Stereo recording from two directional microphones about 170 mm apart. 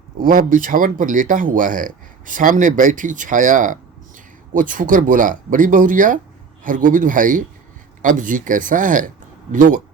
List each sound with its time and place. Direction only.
0.2 s speech: 55° right (ahead or behind)